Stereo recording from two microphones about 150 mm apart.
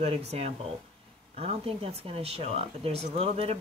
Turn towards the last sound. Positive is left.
turn(degrees=-40)  # may be behind; listen again after turning